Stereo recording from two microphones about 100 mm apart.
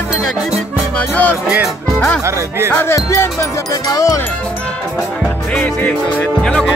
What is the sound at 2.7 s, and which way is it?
Music, 25° left (ahead or behind).